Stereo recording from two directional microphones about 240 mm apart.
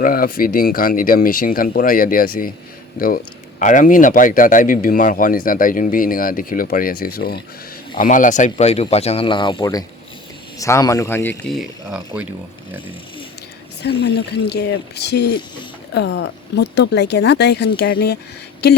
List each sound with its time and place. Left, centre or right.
0.0 s speech: left
3.6 s speech: left; by 12.3 s centre
13.8 s speech: left